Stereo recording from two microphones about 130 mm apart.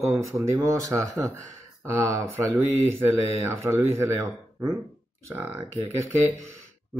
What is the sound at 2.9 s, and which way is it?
Speech, 20° right (ahead or behind).